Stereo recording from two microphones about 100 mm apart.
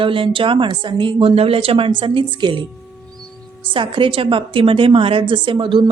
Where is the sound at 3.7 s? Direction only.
60° right (ahead or behind).